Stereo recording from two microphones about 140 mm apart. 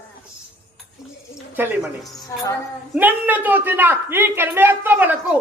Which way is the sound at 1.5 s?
15° right (ahead or behind).